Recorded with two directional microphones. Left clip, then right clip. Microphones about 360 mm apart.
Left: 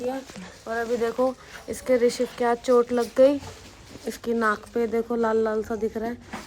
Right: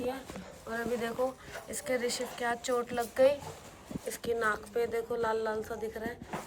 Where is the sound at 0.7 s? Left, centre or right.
Centre.